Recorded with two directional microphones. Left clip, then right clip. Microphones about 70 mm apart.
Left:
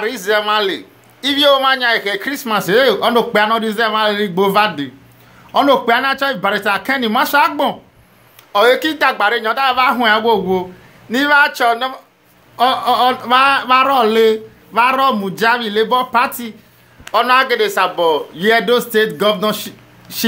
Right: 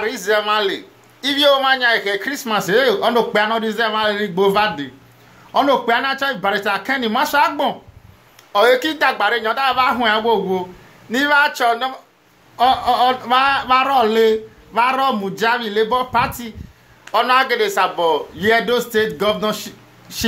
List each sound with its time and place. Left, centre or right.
0.0 s a man's voice: centre
5.5 s a man's voice: left